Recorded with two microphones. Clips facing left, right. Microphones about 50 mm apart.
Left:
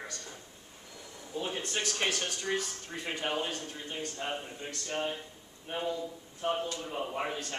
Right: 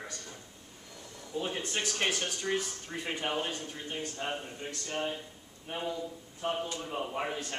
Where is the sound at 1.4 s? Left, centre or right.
Centre.